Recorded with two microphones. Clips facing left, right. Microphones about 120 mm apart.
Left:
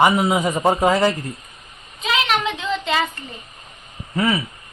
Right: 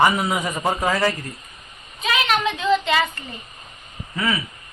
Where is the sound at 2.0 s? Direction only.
20° left (ahead or behind).